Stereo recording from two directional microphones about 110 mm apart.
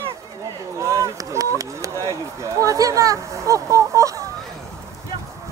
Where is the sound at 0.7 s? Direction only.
30° right (ahead or behind).